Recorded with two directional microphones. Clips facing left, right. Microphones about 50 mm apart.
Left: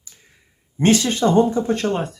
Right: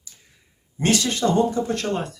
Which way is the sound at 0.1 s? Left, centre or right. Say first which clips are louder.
Left 2 dB; left.